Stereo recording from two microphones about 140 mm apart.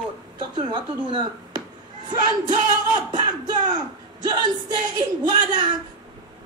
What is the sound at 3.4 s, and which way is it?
Speech, 30° right (ahead or behind).